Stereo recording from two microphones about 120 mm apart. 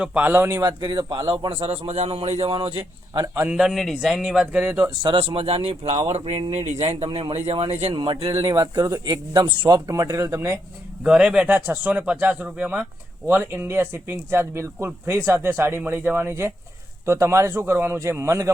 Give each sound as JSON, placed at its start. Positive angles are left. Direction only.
{"t": 0.0, "sound": "speech", "side_deg": -15}
{"t": 0.6, "sound": "speech", "side_deg": -35}
{"t": 1.3, "sound": "a man's voice", "side_deg": -50}
{"t": 3.2, "sound": "speech", "side_deg": -20}
{"t": 3.5, "sound": "speech", "side_deg": -5}
{"t": 4.6, "sound": "speech", "side_deg": -15}
{"t": 5.0, "sound": "speech", "side_deg": -50}
{"t": 7.9, "sound": "a man's voice", "side_deg": -45}
{"t": 8.4, "sound": "speech", "side_deg": -25}
{"t": 11.0, "sound": "speech", "side_deg": -5}